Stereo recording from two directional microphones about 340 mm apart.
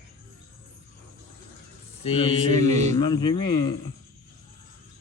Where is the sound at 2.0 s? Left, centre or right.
Centre.